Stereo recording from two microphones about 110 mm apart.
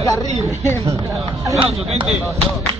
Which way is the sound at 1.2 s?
30° right (ahead or behind).